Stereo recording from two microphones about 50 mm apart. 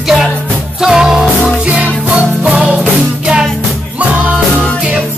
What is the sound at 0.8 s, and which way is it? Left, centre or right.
Music, centre.